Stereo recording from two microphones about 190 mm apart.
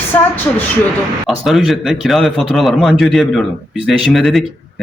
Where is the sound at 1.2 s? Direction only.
Centre (ahead or behind).